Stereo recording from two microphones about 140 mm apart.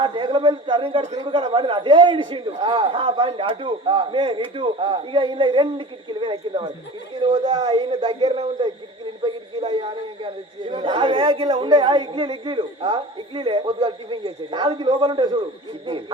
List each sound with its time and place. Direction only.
0.0 s a man's voice: 35° right (ahead or behind)
9.2 s a sound: 40° right (ahead or behind)
10.2 s a man's voice: 40° right (ahead or behind)